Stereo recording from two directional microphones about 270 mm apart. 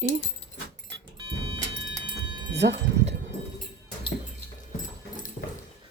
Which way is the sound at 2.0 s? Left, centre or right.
Centre.